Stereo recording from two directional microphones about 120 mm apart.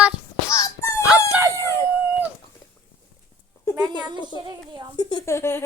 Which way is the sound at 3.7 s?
35° right (ahead or behind).